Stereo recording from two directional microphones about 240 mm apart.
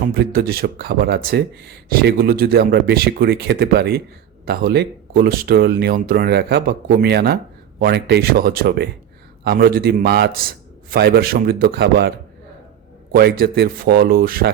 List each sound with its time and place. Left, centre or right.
0.1 s speech: right
13.1 s speech: right